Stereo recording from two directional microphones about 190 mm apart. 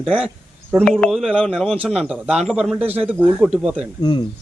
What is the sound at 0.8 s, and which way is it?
A man's voice, 5° left (ahead or behind).